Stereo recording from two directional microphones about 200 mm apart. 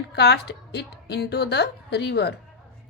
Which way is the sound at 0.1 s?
55° left (ahead or behind).